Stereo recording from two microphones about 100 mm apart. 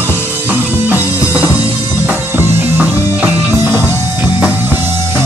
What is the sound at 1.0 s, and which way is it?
Music, 30° left (ahead or behind).